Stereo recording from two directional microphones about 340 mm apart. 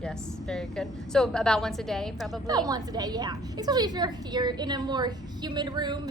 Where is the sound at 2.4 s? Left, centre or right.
Centre.